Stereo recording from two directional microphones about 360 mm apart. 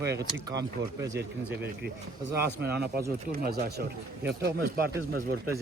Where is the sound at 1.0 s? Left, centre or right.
Centre.